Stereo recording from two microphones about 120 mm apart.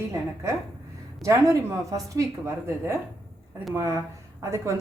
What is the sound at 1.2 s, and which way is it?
A woman's voice, 25° right (ahead or behind).